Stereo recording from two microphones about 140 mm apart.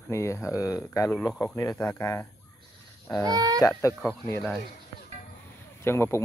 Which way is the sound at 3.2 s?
30° right (ahead or behind).